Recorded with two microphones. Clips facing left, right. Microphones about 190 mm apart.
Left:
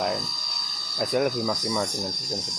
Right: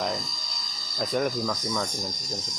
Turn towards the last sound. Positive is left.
turn(degrees=10)  # may be behind; listen again after turning